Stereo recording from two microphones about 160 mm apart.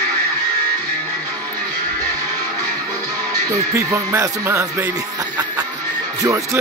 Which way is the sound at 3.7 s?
20° right (ahead or behind).